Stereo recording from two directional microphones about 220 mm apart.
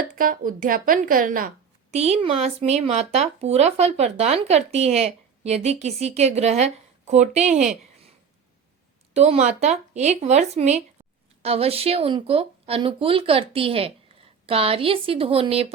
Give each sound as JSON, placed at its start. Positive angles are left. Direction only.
{"t": 0.2, "sound": "a woman's voice", "side_deg": -40}
{"t": 9.1, "sound": "a woman's voice", "side_deg": -30}